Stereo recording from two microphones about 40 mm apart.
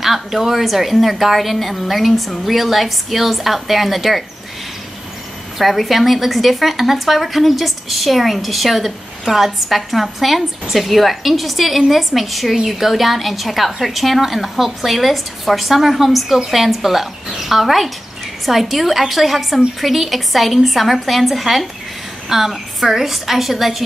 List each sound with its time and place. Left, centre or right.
0.0 s a woman's voice: centre
5.6 s a woman's voice: centre